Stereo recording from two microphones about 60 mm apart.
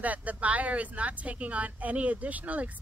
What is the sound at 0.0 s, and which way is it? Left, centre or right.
A woman's voice, right.